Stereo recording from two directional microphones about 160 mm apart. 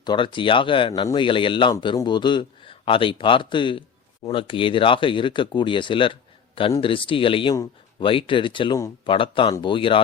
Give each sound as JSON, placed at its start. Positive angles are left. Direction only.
{"t": 0.0, "sound": "speech", "side_deg": 30}